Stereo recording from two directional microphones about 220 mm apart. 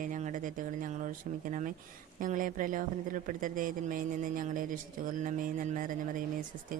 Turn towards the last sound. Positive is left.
turn(degrees=-35)  # may be behind; listen again after turning